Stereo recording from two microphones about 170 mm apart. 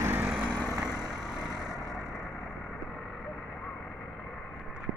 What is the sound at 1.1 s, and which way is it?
Vehicle, 5° right (ahead or behind).